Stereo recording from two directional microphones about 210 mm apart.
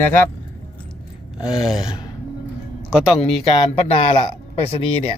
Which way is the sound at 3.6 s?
25° left (ahead or behind).